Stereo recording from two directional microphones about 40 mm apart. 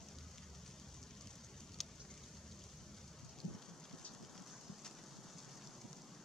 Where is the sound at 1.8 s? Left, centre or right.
Centre.